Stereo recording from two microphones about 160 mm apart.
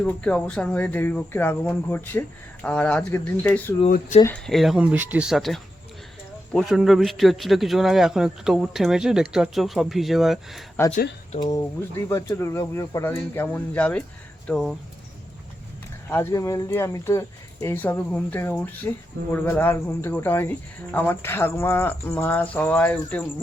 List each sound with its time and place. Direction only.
0.0 s speech: 5° left (ahead or behind)
3.8 s speech: 60° left (ahead or behind)
4.3 s a man's voice: centre (ahead or behind)
10.8 s speech: 15° left (ahead or behind)
11.3 s a man's voice: 25° left (ahead or behind); by 14.8 s centre (ahead or behind)
16.0 s speech: 15° left (ahead or behind)